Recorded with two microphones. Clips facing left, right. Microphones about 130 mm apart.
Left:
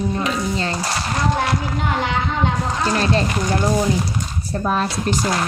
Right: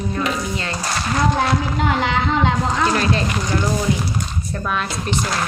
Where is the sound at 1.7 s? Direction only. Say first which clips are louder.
Right 2 dB; 90° right.